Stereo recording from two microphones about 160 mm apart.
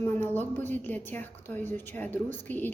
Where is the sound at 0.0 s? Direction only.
15° left (ahead or behind).